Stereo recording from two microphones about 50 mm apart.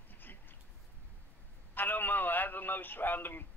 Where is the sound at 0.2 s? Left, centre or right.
Left.